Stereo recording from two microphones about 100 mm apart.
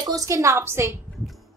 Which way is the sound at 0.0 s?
35° right (ahead or behind).